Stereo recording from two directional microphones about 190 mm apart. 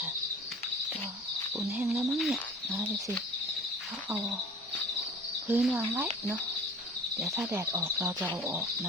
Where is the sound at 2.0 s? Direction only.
Centre (ahead or behind).